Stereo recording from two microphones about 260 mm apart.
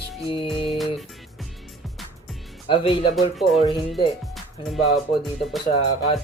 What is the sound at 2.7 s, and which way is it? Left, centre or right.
Speech, centre.